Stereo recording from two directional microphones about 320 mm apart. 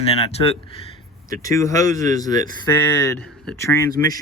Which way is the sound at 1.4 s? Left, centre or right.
Centre.